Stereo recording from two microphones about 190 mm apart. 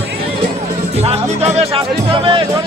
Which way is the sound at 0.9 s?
35° right (ahead or behind).